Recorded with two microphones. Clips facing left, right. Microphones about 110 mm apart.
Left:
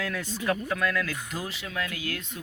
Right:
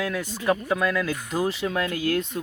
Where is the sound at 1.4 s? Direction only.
40° right (ahead or behind).